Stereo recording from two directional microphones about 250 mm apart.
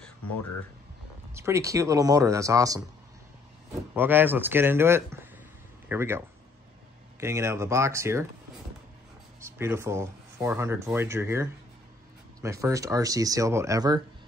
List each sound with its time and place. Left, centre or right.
1.3 s speech: centre
3.9 s speech: centre
9.4 s speech: centre